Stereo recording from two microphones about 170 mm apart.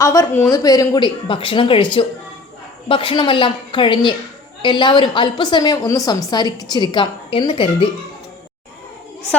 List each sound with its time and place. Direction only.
0.0 s a woman's voice: 15° left (ahead or behind)